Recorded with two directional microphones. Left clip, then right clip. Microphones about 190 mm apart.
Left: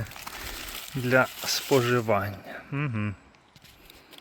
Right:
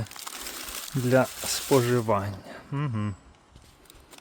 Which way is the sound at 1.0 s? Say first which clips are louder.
Left 1 dB; 25° right (ahead or behind).